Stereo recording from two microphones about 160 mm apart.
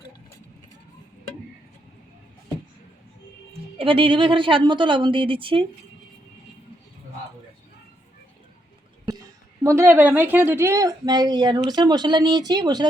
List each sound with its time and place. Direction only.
3.8 s a woman's voice: 35° right (ahead or behind)
9.6 s a woman's voice: 15° right (ahead or behind)